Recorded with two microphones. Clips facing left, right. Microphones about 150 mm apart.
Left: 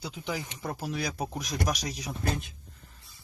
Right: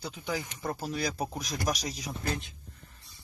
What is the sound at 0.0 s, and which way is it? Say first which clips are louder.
Speech: even; 15° left (ahead or behind).